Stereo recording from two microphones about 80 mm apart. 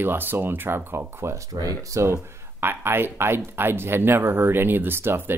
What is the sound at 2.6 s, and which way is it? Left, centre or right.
Speech, right.